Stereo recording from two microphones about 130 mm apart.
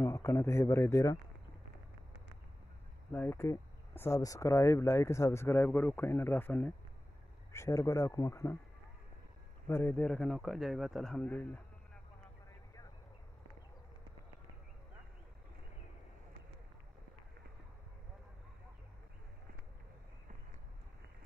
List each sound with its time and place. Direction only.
0.0 s speech: 20° left (ahead or behind)
3.1 s speech: 15° left (ahead or behind)
9.7 s speech: 15° left (ahead or behind)
10.0 s speech: 5° left (ahead or behind)